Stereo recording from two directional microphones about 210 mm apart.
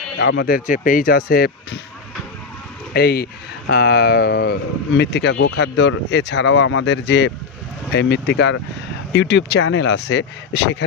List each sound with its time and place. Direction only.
0.2 s speech: 55° left (ahead or behind)
2.9 s speech: 50° left (ahead or behind)